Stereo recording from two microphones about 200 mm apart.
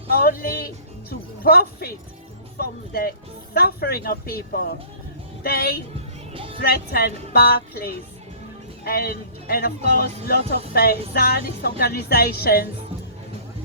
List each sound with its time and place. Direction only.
0.2 s speech: 50° left (ahead or behind)
6.3 s music: 25° right (ahead or behind)
6.6 s speech: 50° left (ahead or behind)